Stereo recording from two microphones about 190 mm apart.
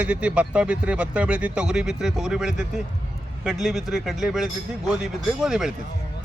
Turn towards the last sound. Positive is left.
turn(degrees=-5)  # may be behind; listen again after turning